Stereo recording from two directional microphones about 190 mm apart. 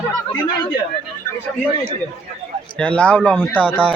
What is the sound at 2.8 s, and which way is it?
Speech, 5° left (ahead or behind).